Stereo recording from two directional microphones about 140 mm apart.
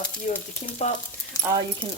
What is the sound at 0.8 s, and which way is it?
Speech, 55° left (ahead or behind).